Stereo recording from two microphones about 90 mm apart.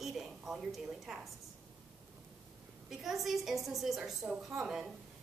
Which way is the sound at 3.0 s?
5° right (ahead or behind).